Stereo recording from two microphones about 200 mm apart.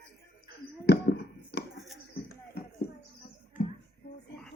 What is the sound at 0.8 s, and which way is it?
Hands, 55° left (ahead or behind).